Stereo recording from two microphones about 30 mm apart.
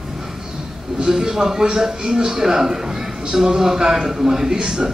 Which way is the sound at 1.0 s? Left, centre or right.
Centre.